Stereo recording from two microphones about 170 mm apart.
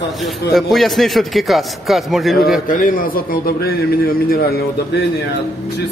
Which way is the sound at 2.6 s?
55° left (ahead or behind).